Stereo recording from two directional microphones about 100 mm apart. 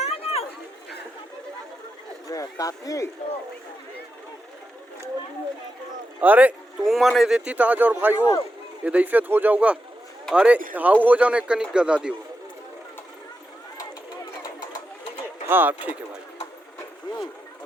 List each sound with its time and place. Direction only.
0.0 s chatter: 80° left
2.2 s speech: 35° left (ahead or behind)
6.1 s speech: 15° right (ahead or behind)
6.8 s speech: centre (ahead or behind)
15.4 s speech: 20° right (ahead or behind)